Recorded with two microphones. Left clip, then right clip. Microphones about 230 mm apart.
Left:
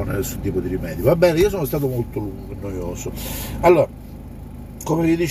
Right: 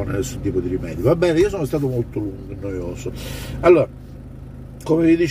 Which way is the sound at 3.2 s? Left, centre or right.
Centre.